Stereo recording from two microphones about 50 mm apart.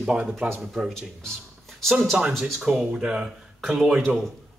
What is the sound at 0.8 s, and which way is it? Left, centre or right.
Speech, centre.